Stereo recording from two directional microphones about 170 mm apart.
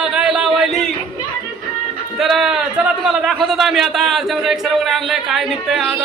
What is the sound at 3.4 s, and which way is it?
Speech, centre (ahead or behind).